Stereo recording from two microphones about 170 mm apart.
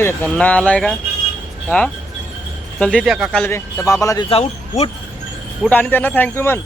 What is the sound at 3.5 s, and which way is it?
Speech, 15° left (ahead or behind).